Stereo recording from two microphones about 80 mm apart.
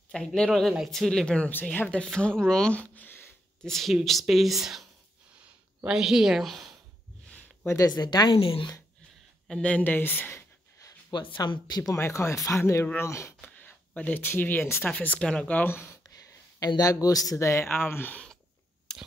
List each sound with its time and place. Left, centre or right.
0.1 s speech: centre
1.5 s speech: left
3.6 s speech: centre
5.9 s speech: centre
7.6 s speech: left
7.9 s a woman's voice: left
9.6 s speech: centre
11.1 s speech: left
11.9 s speech: left
13.4 s a sound: centre
14.3 s speech: left
15.7 s speech: left
16.1 s speech: left
18.9 s a sound: centre